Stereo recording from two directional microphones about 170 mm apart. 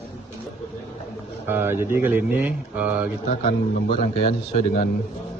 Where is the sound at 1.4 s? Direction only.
10° right (ahead or behind).